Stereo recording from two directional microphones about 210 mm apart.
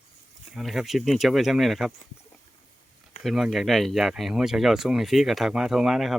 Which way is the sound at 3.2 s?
Centre (ahead or behind).